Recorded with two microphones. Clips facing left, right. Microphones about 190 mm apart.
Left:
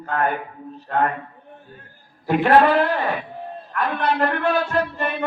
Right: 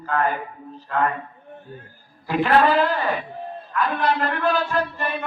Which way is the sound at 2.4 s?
55° left (ahead or behind).